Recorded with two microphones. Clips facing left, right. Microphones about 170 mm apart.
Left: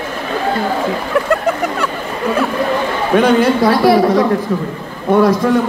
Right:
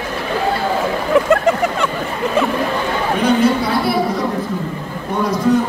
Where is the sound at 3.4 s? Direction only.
90° left.